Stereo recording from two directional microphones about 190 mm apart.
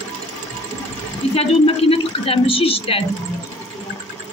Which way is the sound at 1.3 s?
30° left (ahead or behind).